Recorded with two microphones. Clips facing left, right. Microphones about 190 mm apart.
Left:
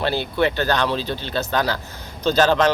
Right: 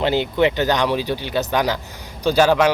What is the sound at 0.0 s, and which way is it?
Speech, 15° right (ahead or behind).